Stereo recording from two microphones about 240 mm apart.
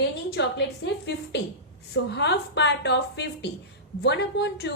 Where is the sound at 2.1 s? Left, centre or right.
Left.